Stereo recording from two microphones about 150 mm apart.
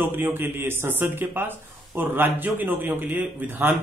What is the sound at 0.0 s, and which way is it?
A man's voice, 15° right (ahead or behind).